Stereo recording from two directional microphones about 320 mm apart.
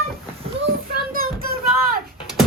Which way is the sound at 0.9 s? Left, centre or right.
Right.